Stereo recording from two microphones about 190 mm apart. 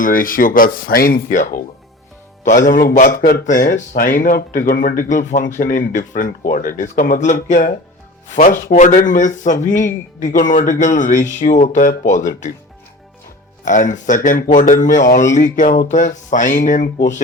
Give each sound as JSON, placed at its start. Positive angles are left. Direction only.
{"t": 0.0, "sound": "a man's voice", "side_deg": 45}
{"t": 13.7, "sound": "speech", "side_deg": 40}